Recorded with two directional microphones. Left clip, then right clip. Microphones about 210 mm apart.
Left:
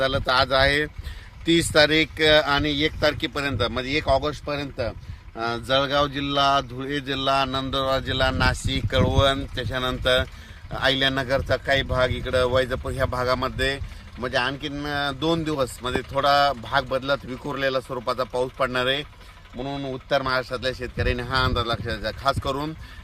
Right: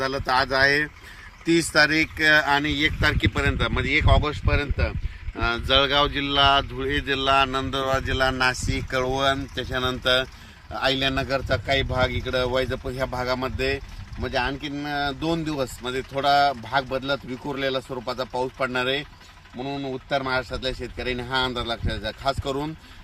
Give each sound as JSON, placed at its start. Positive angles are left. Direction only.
{"t": 0.0, "sound": "speech", "side_deg": 40}
{"t": 8.9, "sound": "speech", "side_deg": 40}
{"t": 10.8, "sound": "speech", "side_deg": 15}